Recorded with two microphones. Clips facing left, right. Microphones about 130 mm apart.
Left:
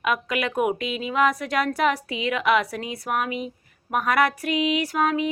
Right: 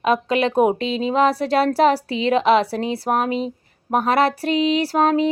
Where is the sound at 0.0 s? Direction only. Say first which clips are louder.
Right 7 dB; 30° right (ahead or behind).